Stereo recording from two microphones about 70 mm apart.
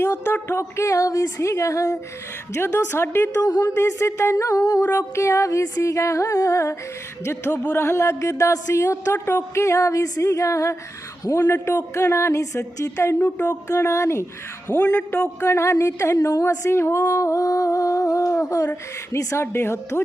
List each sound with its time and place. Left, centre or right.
0.5 s humming: left
2.6 s speech: left
3.4 s humming: left
4.8 s humming: left
11.3 s speech: left
12.0 s humming: left
13.1 s speech: left
13.7 s humming: left
14.8 s speech: left
15.4 s humming: left
16.1 s a woman's voice: left
16.6 s humming: left
19.1 s speech: left